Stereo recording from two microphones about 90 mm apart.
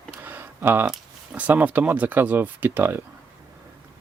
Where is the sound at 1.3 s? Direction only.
15° right (ahead or behind).